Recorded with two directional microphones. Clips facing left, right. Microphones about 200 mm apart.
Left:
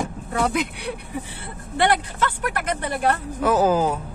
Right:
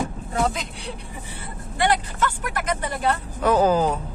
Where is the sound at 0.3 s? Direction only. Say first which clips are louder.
Left 3 dB; 60° left (ahead or behind).